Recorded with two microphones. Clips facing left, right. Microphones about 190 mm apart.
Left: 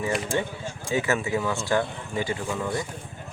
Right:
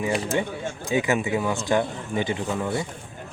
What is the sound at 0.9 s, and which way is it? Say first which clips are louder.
A man's voice: right 2 dB; 15° right (ahead or behind).